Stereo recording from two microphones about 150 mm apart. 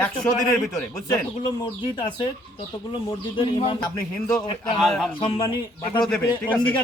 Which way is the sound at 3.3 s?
35° left (ahead or behind).